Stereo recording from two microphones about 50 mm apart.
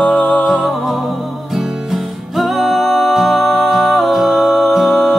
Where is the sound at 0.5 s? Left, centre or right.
Centre.